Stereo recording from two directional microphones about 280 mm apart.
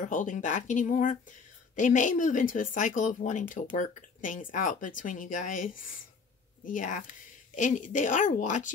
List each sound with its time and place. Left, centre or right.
0.0 s speech: left